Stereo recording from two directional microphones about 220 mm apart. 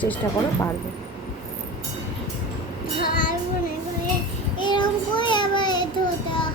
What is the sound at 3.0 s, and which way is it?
Child singing, 40° left (ahead or behind).